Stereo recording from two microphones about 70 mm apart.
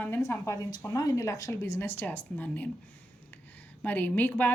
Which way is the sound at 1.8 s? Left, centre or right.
Left.